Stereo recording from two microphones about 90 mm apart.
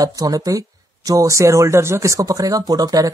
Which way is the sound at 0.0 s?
45° right (ahead or behind).